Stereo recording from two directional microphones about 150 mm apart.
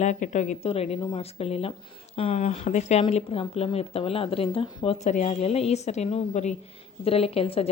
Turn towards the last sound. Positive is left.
turn(degrees=40)  # may be behind; listen again after turning